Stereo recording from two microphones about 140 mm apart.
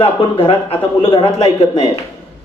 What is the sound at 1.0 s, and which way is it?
Speech, 30° left (ahead or behind).